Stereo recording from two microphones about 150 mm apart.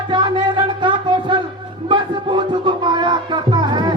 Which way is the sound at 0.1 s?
30° right (ahead or behind).